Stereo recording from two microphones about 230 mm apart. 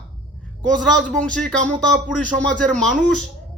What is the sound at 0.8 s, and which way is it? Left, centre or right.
Speech, right.